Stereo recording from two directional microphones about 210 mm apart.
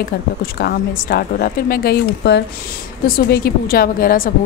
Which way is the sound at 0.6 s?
45° left (ahead or behind).